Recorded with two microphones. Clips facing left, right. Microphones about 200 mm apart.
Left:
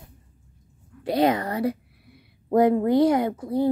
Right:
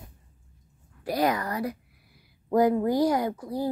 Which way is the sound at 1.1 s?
25° left (ahead or behind).